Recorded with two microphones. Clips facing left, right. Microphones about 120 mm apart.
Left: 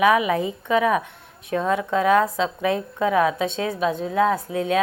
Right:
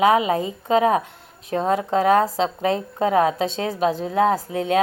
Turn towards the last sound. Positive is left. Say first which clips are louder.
# right 1 dB
turn(degrees=-35)  # may be behind; listen again after turning